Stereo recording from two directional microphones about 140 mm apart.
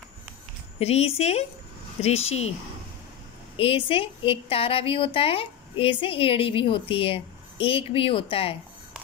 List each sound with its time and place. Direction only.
0.7 s speech: 45° left (ahead or behind)
3.5 s a woman's voice: 40° left (ahead or behind)